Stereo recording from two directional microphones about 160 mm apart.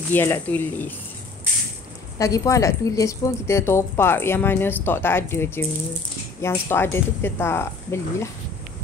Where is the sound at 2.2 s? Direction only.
20° left (ahead or behind).